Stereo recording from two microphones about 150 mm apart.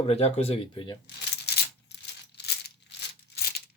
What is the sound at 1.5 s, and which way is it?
Coin, 90° left.